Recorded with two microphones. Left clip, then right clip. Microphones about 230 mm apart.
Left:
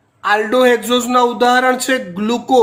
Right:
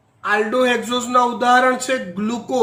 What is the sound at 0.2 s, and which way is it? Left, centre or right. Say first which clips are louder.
A man's voice: left 5 dB; left.